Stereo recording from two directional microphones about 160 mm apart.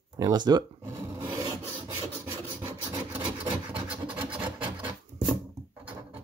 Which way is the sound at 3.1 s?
10° right (ahead or behind).